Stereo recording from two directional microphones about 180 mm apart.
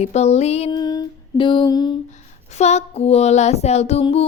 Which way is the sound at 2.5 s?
40° left (ahead or behind).